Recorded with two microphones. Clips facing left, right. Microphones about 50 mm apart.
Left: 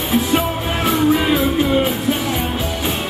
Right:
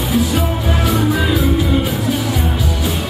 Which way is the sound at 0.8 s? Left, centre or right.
Left.